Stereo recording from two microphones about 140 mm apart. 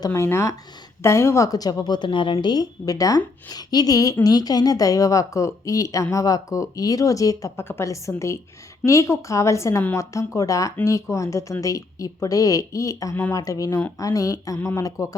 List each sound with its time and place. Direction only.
0.0 s speech: 20° left (ahead or behind)